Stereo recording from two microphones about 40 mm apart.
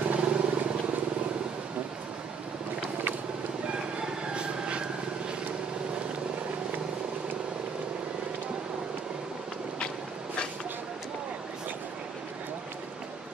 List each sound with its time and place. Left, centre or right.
0.0 s vehicle: right
4.3 s vehicle: right